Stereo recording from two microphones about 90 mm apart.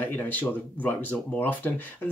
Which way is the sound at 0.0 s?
20° left (ahead or behind).